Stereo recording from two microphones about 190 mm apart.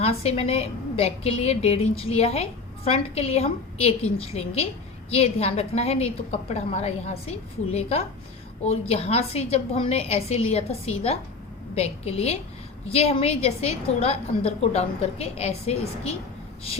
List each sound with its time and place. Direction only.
0.0 s a woman's voice: 30° left (ahead or behind)